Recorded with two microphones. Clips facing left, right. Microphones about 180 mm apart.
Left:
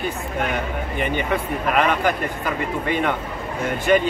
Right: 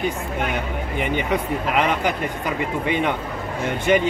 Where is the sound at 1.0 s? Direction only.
15° right (ahead or behind).